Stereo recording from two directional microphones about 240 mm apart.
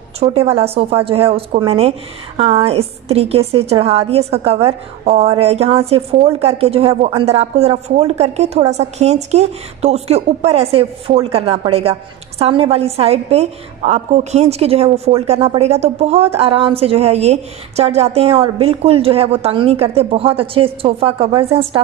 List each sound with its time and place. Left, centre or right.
0.2 s a woman's voice: right